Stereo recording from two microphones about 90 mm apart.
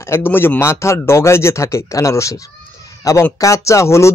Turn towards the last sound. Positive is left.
turn(degrees=35)  # may be behind; listen again after turning